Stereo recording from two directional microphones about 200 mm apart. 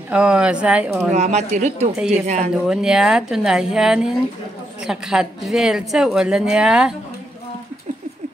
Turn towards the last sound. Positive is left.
turn(degrees=-5)  # may be behind; listen again after turning